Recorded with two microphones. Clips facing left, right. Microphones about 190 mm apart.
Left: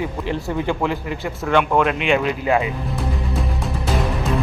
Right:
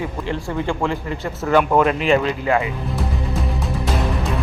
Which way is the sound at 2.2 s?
15° left (ahead or behind).